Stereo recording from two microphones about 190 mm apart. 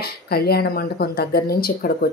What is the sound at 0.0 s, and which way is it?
Speech, 55° left (ahead or behind).